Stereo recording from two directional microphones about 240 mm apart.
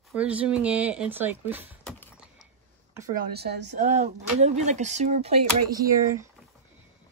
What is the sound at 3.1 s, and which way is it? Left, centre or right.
Speech, right.